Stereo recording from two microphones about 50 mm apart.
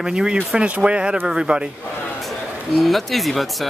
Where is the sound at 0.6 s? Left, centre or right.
Right.